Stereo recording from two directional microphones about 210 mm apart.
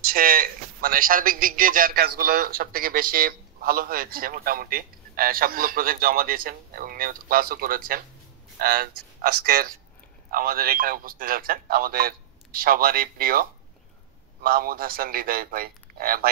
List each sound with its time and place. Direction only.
0.0 s speech: 45° right (ahead or behind)